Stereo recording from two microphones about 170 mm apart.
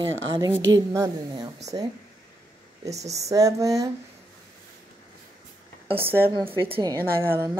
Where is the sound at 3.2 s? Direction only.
20° right (ahead or behind).